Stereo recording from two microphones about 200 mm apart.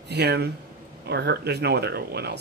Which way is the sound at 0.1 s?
55° right (ahead or behind).